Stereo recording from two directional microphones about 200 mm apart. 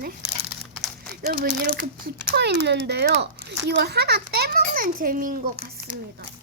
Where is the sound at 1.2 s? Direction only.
50° right (ahead or behind).